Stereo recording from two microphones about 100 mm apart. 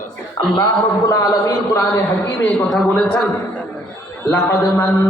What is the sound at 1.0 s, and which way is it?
Speech, 35° left (ahead or behind).